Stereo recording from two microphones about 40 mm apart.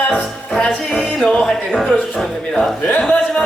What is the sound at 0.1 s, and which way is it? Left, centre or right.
Music, centre.